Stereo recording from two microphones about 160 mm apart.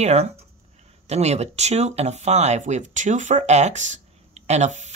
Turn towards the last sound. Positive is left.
turn(degrees=-45)  # may be behind; listen again after turning